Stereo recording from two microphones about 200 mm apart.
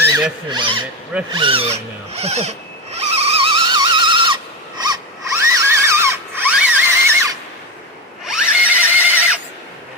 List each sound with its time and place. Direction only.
0.0 s zipper: 10° right (ahead or behind)
0.5 s speech: 25° right (ahead or behind)
1.3 s zipper: 25° right (ahead or behind)
4.8 s a sound: 15° right (ahead or behind)
8.3 s neigh: 10° right (ahead or behind)